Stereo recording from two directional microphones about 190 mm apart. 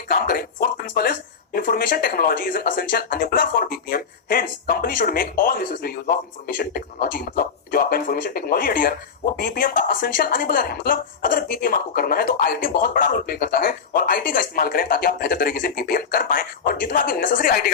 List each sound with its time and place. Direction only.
0.1 s speech: 50° left (ahead or behind)